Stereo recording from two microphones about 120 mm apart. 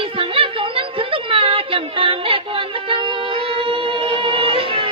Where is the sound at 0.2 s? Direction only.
50° right (ahead or behind).